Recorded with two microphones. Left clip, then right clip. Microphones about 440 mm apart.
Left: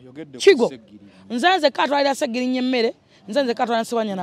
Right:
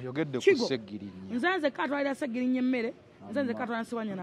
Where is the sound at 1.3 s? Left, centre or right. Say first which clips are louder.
Left 11 dB; left.